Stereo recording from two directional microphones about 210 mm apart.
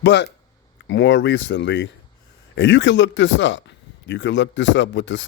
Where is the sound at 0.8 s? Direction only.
60° left (ahead or behind).